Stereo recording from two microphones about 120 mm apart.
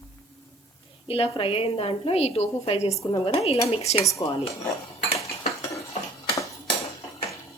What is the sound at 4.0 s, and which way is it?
Speech, 25° left (ahead or behind).